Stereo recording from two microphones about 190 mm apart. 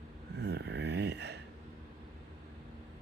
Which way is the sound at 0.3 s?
60° right (ahead or behind).